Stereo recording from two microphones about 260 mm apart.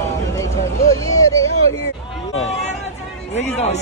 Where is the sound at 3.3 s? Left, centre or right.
Left.